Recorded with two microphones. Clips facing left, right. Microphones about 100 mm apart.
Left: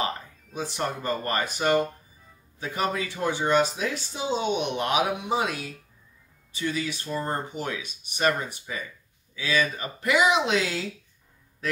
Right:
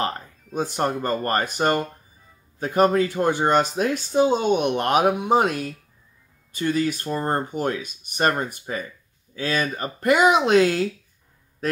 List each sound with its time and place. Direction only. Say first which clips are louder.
0.6 s speech: right 6 dB; 50° right (ahead or behind)